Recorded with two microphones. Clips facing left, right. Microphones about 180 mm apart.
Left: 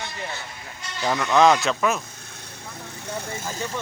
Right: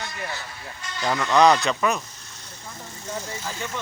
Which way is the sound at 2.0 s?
55° left (ahead or behind).